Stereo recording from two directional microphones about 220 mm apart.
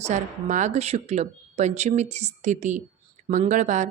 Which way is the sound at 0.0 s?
35° right (ahead or behind).